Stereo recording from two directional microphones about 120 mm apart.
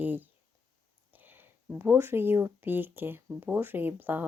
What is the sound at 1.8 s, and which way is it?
A woman's voice, 20° right (ahead or behind).